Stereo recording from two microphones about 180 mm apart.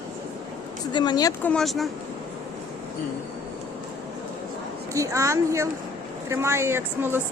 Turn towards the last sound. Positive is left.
turn(degrees=-10)  # may be behind; listen again after turning